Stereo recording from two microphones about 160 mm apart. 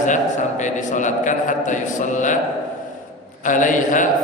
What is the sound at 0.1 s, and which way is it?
A man's voice, 50° left (ahead or behind).